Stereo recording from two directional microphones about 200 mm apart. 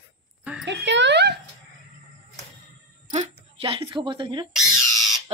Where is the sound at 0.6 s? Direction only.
60° right (ahead or behind).